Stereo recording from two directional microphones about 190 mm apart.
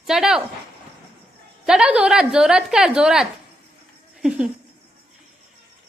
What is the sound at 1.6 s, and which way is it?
A woman's voice, 5° right (ahead or behind).